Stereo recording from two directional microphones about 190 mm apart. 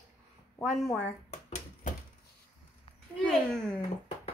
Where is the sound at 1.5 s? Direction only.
45° left (ahead or behind).